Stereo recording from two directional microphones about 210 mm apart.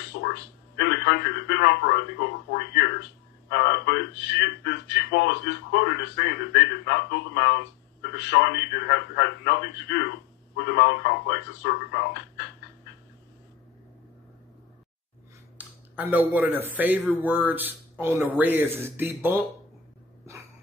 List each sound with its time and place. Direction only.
0.0 s a man's voice: 50° left (ahead or behind)
15.5 s speech: 10° right (ahead or behind)